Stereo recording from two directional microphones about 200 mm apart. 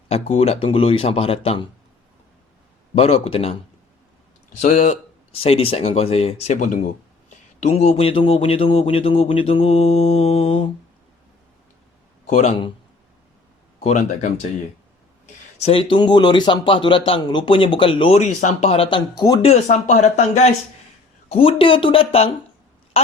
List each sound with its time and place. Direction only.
0.1 s speech: 30° left (ahead or behind)
2.9 s speech: 30° left (ahead or behind)
12.3 s speech: 35° left (ahead or behind)
13.8 s speech: 35° left (ahead or behind)
15.5 s speech: 30° left (ahead or behind)
19.5 s speech: 35° left (ahead or behind)